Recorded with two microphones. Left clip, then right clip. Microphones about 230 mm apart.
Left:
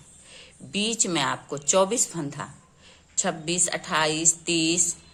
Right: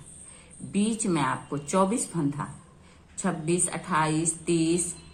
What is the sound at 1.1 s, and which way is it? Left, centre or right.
Speech, left.